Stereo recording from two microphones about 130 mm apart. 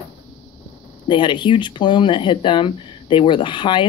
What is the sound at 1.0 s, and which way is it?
Speech, 35° left (ahead or behind).